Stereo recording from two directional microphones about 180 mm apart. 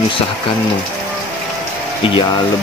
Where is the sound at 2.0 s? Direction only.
30° left (ahead or behind).